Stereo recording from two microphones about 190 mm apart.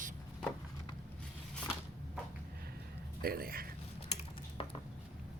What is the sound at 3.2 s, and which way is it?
Speech, 55° right (ahead or behind).